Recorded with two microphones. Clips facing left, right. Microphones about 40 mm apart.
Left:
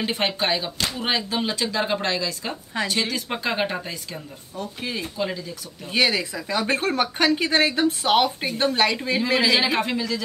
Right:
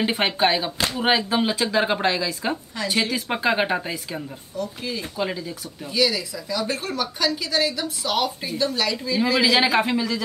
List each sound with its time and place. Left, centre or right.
0.0 s speech: centre
4.6 s speech: left
5.1 s speech: centre
5.9 s speech: left
9.8 s speech: centre